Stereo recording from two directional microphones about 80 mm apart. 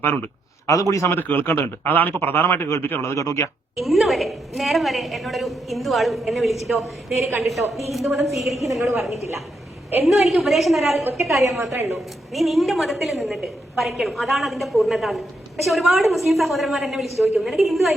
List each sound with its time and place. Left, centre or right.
0.7 s speech: left
1.1 s speech: left
3.8 s a woman's voice: centre
8.8 s a woman's voice: right
10.2 s a woman's voice: centre
11.3 s a woman's voice: right
11.9 s a woman's voice: centre